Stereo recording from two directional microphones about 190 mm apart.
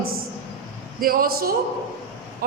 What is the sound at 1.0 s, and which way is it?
Speech, 50° right (ahead or behind).